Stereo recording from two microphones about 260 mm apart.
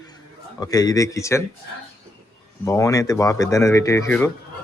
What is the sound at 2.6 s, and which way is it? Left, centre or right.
Speech, centre.